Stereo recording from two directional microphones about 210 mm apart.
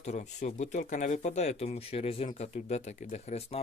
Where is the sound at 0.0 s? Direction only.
35° left (ahead or behind).